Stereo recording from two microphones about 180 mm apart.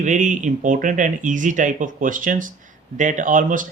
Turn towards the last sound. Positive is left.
turn(degrees=-45)  # may be behind; listen again after turning